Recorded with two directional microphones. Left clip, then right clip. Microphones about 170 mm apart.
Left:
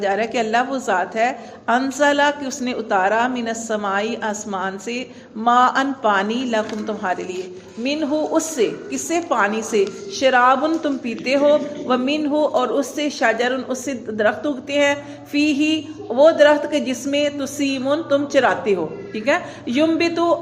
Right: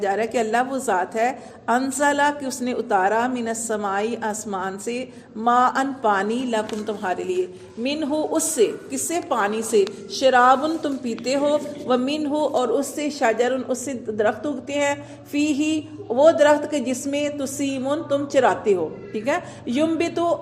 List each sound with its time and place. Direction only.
0.0 s a woman's voice: 40° right (ahead or behind)